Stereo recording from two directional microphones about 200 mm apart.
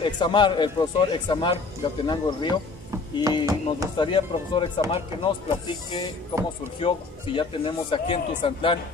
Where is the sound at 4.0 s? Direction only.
25° left (ahead or behind).